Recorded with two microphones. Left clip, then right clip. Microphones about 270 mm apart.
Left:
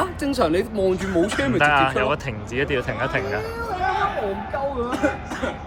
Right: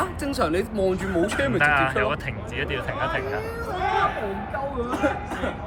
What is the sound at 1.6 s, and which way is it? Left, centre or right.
Speech, centre.